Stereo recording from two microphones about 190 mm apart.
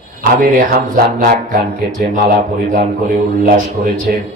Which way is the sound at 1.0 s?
50° right (ahead or behind).